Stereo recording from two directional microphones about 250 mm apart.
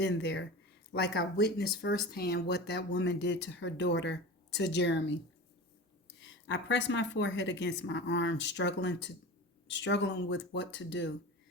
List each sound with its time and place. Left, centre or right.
0.0 s speech: left
6.1 s speech: left